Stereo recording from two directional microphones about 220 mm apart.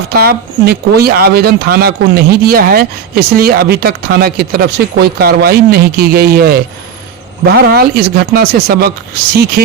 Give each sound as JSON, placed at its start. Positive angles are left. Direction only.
{"t": 0.1, "sound": "speech", "side_deg": -45}